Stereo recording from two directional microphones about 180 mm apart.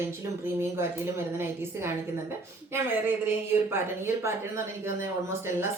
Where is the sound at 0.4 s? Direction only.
15° right (ahead or behind).